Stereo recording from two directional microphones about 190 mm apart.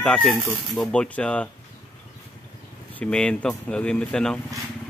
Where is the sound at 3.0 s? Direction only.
5° left (ahead or behind).